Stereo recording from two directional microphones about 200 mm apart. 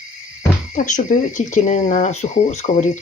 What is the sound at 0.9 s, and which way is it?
Speech, 40° left (ahead or behind).